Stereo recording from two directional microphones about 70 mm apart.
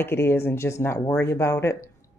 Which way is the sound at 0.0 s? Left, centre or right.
Left.